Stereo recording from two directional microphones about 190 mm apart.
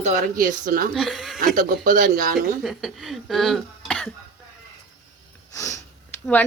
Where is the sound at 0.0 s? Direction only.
40° right (ahead or behind).